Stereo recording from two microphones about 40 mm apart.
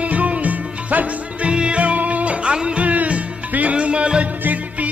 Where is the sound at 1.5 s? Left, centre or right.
Right.